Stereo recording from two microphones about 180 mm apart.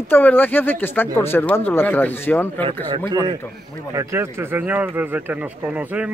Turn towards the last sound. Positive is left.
turn(degrees=-10)  # may be behind; listen again after turning